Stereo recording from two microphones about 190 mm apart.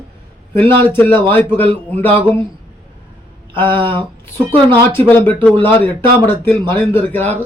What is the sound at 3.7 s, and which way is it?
Speech, 25° right (ahead or behind).